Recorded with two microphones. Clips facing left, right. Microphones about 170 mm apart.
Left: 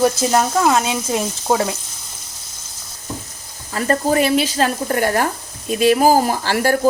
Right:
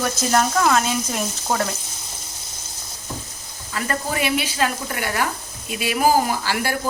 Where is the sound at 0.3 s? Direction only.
25° left (ahead or behind).